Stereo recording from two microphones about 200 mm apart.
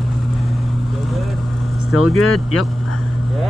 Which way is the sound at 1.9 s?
90° left.